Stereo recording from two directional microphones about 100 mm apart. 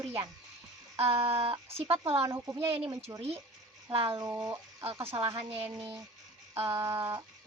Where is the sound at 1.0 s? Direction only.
70° right (ahead or behind).